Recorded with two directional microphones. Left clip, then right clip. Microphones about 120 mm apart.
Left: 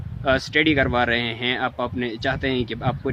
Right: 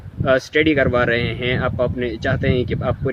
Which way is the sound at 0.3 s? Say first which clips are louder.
Right 3 dB; 30° left (ahead or behind).